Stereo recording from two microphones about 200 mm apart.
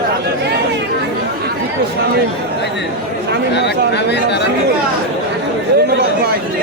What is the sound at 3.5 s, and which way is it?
Speech, 60° left (ahead or behind).